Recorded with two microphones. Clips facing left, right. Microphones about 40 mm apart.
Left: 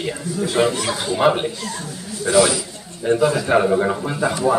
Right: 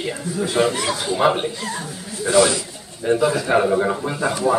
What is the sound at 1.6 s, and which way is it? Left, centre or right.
Speech, centre.